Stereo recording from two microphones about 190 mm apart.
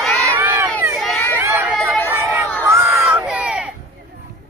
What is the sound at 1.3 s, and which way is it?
Run, 10° right (ahead or behind).